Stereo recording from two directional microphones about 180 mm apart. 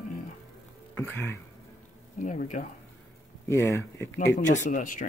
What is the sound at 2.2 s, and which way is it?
Speech, 45° left (ahead or behind).